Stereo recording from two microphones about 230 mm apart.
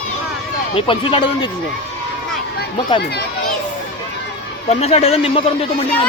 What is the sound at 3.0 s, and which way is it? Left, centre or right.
Speech, left.